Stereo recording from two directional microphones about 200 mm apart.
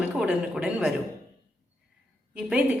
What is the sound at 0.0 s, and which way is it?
Speech, 5° right (ahead or behind).